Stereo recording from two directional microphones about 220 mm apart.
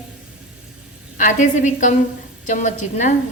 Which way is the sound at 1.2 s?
35° left (ahead or behind).